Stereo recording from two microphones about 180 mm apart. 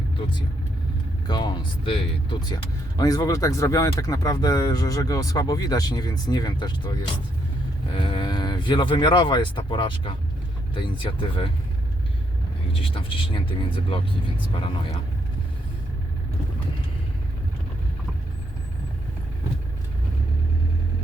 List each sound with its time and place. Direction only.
1.3 s speech: 25° left (ahead or behind)
7.9 s speech: 30° left (ahead or behind)
12.9 s speech: 30° left (ahead or behind)